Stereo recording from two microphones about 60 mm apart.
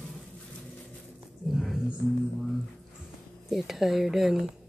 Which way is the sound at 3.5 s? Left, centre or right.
Centre.